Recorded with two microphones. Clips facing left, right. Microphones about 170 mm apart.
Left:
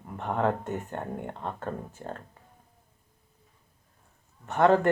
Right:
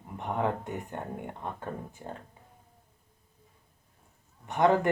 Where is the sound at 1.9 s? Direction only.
15° right (ahead or behind).